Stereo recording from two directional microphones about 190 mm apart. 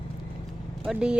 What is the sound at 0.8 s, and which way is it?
Speech, 5° right (ahead or behind).